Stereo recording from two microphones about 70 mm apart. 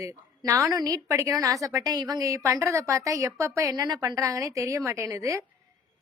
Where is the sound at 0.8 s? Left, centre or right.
Right.